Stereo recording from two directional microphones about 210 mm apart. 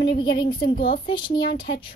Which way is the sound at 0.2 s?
20° left (ahead or behind).